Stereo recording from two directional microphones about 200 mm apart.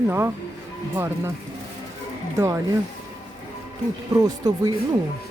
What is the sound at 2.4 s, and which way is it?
Speech, 15° right (ahead or behind).